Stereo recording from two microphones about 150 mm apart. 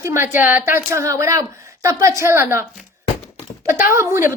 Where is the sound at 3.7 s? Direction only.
20° right (ahead or behind).